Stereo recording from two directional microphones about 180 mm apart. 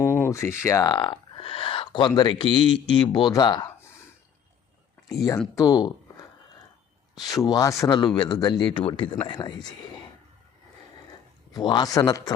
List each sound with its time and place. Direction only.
0.0 s speech: 15° left (ahead or behind)
5.2 s speech: 15° left (ahead or behind)
7.2 s speech: 20° left (ahead or behind)
11.5 s speech: 25° left (ahead or behind)